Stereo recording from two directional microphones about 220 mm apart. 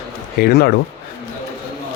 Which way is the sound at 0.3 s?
45° left (ahead or behind).